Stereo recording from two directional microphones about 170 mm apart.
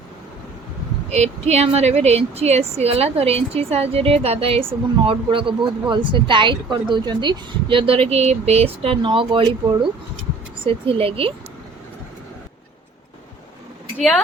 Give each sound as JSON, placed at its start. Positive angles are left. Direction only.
{"t": 1.1, "sound": "a woman's voice", "side_deg": -40}